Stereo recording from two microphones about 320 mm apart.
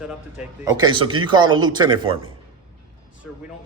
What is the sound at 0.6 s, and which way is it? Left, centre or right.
Speech, centre.